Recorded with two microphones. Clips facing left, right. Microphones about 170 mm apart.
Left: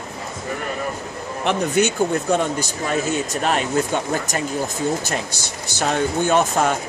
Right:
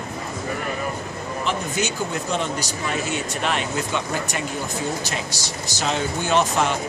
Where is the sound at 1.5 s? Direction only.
60° left (ahead or behind); by 4.4 s 40° left (ahead or behind).